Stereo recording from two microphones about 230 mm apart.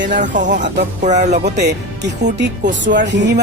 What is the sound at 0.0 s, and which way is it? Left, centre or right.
Speech, right.